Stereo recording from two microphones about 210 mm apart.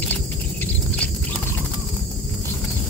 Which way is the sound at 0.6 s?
5° left (ahead or behind).